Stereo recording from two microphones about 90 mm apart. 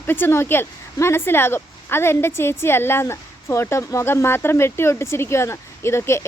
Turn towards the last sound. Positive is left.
turn(degrees=30)  # may be behind; listen again after turning